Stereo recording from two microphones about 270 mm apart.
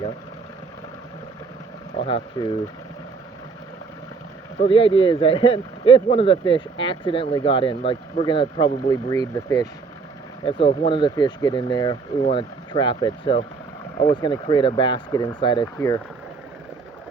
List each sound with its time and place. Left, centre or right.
2.0 s speech: centre
4.6 s speech: centre